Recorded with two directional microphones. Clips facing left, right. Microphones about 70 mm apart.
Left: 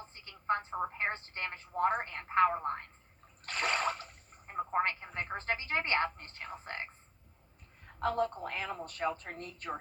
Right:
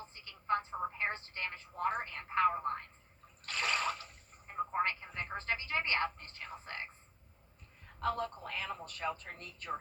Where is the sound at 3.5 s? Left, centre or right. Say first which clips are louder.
Left 2 dB; left.